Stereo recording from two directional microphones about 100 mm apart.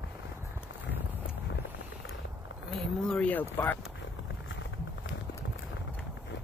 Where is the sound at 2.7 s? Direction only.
5° left (ahead or behind).